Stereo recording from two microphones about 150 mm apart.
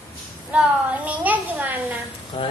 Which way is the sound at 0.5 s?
10° right (ahead or behind).